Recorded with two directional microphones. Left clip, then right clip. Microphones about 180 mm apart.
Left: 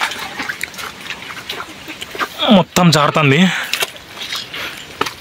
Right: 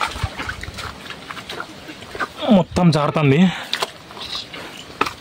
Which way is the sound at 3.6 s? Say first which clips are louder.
Left 4 dB; 10° left (ahead or behind).